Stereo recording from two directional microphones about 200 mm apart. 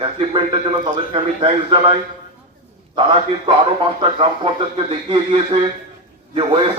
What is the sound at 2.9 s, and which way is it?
A man's voice, 25° right (ahead or behind).